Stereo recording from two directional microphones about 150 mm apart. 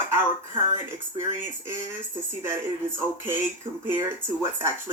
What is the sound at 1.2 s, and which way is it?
Speech, 15° right (ahead or behind).